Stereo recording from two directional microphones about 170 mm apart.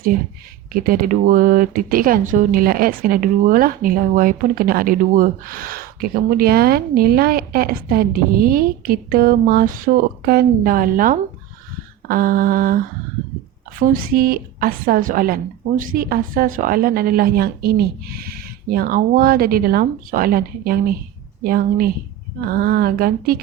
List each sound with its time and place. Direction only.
0.7 s speech: 55° right (ahead or behind)